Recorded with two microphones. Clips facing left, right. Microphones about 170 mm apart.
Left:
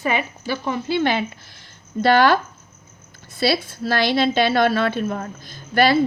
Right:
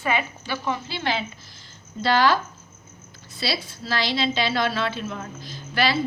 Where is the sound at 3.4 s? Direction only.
55° left (ahead or behind).